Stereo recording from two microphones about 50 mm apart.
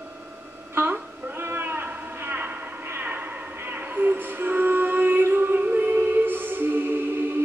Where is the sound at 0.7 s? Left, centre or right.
Right.